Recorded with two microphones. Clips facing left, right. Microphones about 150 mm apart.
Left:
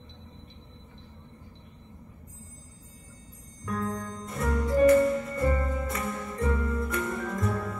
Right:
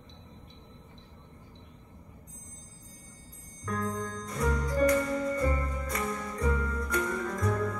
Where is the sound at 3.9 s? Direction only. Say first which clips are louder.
Even; 25° left (ahead or behind).